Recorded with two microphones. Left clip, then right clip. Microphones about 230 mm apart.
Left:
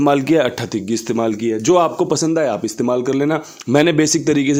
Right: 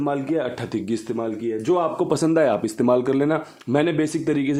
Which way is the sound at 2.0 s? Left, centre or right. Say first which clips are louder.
Left 2 dB; centre.